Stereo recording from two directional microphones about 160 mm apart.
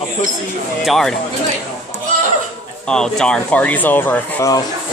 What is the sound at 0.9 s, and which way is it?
Speech, 5° left (ahead or behind).